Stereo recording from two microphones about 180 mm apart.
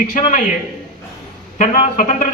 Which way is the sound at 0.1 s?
45° left (ahead or behind).